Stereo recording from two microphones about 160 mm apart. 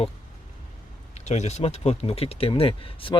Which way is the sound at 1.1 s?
45° left (ahead or behind).